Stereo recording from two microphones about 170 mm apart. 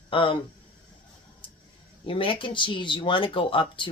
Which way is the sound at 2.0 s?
30° left (ahead or behind).